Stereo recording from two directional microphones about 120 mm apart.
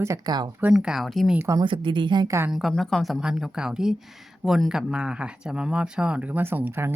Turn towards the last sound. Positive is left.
turn(degrees=-20)  # may be behind; listen again after turning